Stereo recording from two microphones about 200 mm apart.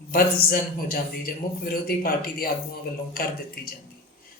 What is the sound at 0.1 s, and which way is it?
A woman's voice, 45° left (ahead or behind).